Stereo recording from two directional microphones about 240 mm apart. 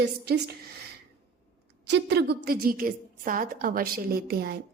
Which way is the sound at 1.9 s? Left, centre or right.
Right.